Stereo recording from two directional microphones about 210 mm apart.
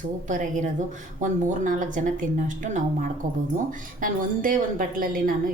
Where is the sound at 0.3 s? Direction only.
35° right (ahead or behind).